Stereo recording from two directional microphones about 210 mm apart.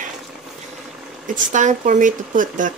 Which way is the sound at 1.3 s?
35° right (ahead or behind).